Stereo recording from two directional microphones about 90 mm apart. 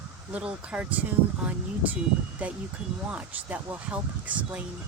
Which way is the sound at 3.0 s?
15° right (ahead or behind).